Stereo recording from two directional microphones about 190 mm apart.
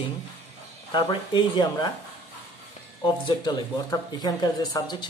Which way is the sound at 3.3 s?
25° left (ahead or behind).